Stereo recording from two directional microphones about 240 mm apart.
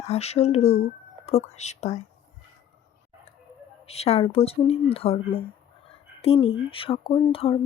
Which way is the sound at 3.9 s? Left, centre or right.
Left.